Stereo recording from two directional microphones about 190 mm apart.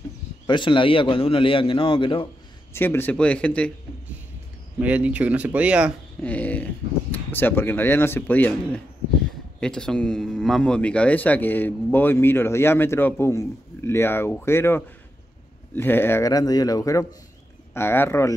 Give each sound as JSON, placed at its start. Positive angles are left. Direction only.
{"t": 0.5, "sound": "a man's voice", "side_deg": 25}
{"t": 2.7, "sound": "speech", "side_deg": 10}
{"t": 4.7, "sound": "speech", "side_deg": -10}
{"t": 6.2, "sound": "speech", "side_deg": 10}